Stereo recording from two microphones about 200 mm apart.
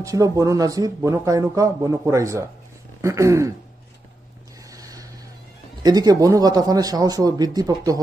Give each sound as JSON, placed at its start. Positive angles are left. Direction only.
{"t": 0.0, "sound": "speech", "side_deg": -15}
{"t": 4.6, "sound": "a sound", "side_deg": -15}
{"t": 5.8, "sound": "a man's voice", "side_deg": -20}